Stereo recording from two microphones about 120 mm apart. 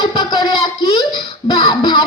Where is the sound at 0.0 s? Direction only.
35° left (ahead or behind).